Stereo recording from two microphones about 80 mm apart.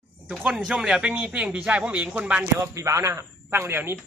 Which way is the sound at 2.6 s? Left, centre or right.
Right.